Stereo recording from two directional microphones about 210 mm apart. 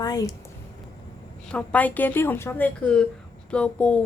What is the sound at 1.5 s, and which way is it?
A woman's voice, 5° left (ahead or behind).